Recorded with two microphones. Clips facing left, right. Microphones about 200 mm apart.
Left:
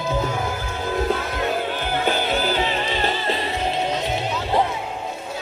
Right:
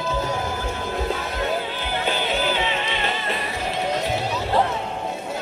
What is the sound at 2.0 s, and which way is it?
Music, 45° left (ahead or behind).